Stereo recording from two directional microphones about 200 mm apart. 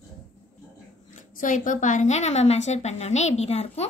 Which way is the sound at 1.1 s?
40° left (ahead or behind).